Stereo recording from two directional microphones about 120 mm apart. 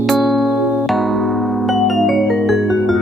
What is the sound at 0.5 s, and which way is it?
Music, 20° right (ahead or behind).